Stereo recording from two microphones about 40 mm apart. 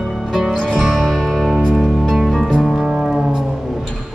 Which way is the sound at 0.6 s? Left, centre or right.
Centre.